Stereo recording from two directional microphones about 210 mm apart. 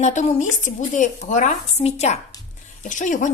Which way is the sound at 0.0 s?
35° left (ahead or behind).